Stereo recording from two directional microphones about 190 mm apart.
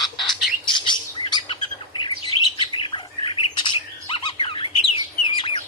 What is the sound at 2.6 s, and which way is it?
Bird, 25° left (ahead or behind).